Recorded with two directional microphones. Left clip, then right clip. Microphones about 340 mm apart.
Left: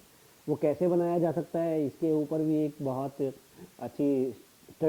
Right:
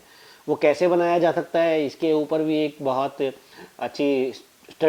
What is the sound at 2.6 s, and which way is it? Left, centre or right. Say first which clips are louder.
Speech: right 9 dB; centre.